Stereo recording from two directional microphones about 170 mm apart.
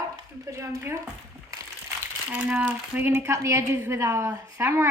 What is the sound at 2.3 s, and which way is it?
Speech, 10° right (ahead or behind).